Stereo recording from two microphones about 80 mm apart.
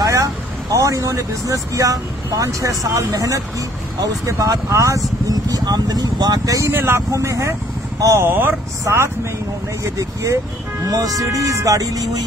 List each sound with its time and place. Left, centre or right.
0.0 s speech: right
5.3 s speech: right
6.7 s speech: right
7.1 s speech: right
8.2 s speech: right